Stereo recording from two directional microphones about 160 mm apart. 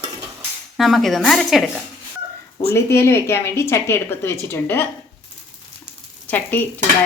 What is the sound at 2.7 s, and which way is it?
A woman's voice, 15° left (ahead or behind).